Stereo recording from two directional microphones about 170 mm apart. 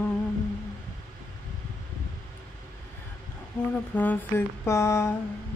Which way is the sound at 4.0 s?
10° left (ahead or behind).